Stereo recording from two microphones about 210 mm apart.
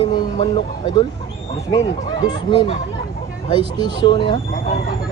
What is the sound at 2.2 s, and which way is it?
Speech, 20° left (ahead or behind).